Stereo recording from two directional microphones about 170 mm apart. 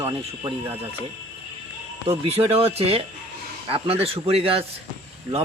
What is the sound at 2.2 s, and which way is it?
Speech, 35° right (ahead or behind).